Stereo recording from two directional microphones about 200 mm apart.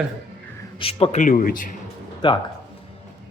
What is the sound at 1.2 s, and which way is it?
Speech, 45° left (ahead or behind).